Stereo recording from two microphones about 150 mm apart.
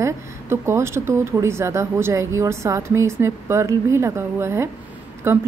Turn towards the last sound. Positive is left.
turn(degrees=-15)  # may be behind; listen again after turning